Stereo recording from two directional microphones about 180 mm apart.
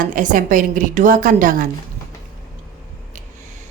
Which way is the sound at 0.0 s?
45° right (ahead or behind).